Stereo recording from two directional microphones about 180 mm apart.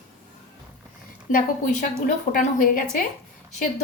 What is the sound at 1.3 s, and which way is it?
A woman's voice, 50° left (ahead or behind).